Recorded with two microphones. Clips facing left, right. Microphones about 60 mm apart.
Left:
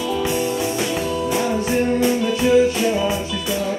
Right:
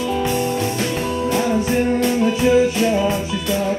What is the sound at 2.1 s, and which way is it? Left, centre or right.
Music, right.